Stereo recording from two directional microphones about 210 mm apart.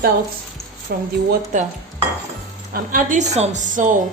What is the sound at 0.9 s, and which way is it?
Speech, 50° right (ahead or behind).